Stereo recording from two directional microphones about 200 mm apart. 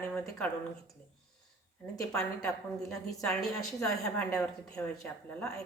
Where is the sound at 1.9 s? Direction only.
5° left (ahead or behind).